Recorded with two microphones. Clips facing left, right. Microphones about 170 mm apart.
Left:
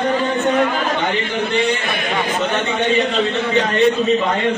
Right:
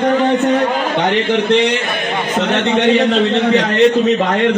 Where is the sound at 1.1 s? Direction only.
80° right.